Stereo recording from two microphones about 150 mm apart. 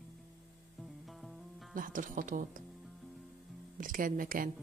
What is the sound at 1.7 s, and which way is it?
Speech, 65° right (ahead or behind).